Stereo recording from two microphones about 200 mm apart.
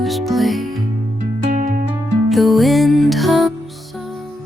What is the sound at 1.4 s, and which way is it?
Music, 40° right (ahead or behind).